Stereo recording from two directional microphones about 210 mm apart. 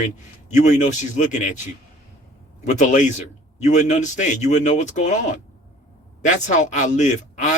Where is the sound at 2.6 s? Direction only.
35° left (ahead or behind).